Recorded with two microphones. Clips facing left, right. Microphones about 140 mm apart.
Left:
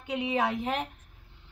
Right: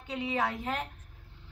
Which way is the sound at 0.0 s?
15° left (ahead or behind).